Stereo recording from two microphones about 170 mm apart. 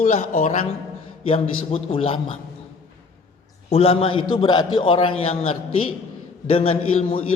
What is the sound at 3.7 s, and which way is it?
A man's voice, 35° left (ahead or behind).